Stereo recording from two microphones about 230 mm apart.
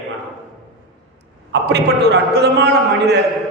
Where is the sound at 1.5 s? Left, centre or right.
Right.